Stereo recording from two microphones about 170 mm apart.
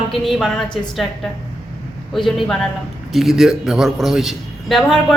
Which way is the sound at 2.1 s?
Centre (ahead or behind).